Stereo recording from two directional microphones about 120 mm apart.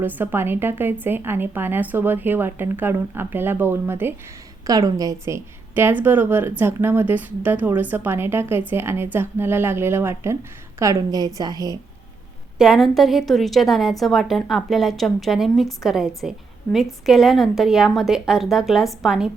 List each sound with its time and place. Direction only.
0.0 s a woman's voice: 15° right (ahead or behind)
4.6 s a woman's voice: 30° right (ahead or behind)
12.5 s a woman's voice: centre (ahead or behind)